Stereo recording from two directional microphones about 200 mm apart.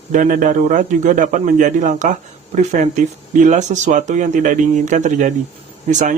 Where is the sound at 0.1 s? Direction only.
40° right (ahead or behind).